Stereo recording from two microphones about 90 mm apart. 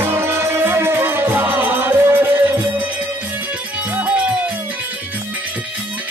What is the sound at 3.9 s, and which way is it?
Music, 15° right (ahead or behind).